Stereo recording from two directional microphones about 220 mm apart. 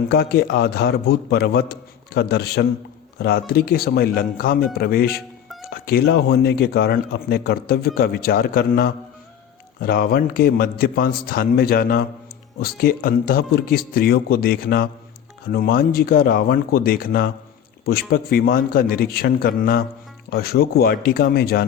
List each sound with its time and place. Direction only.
0.1 s speech: 45° left (ahead or behind)